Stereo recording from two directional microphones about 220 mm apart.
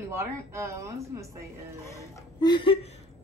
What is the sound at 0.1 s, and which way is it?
Speech, 10° right (ahead or behind).